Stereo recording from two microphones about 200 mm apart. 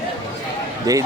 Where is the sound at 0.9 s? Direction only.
15° right (ahead or behind).